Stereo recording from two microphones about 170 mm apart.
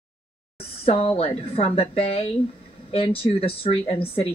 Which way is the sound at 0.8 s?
35° left (ahead or behind).